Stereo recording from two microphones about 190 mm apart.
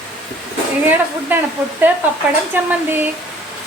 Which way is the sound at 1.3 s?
10° right (ahead or behind).